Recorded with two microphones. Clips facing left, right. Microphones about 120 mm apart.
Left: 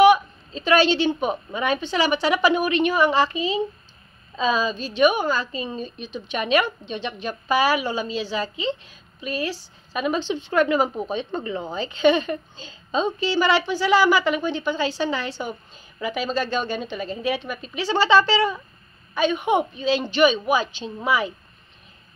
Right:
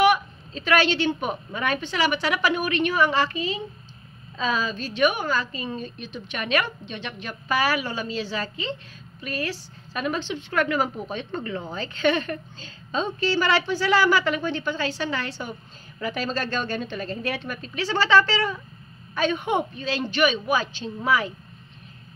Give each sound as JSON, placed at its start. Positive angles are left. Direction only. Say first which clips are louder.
{"t": 0.0, "sound": "a woman's voice", "louder": "left 5 dB", "side_deg": 25}